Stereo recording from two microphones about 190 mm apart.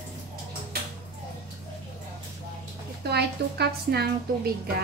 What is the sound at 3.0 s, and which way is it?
A woman's voice, 60° right (ahead or behind).